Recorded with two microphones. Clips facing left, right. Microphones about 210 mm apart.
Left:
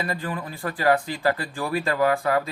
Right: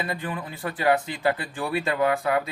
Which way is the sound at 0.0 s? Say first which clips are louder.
Left 1 dB; 20° right (ahead or behind).